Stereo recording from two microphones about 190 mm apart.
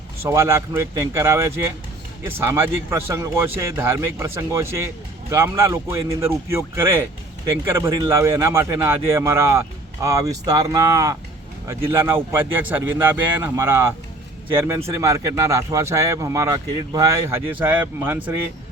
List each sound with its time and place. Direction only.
0.2 s a man's voice: 15° right (ahead or behind)